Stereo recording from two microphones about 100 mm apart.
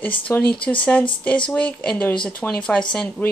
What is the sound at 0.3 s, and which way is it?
Speech, 20° left (ahead or behind).